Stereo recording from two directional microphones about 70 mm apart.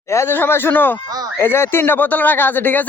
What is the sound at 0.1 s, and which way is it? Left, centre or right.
Speech, left.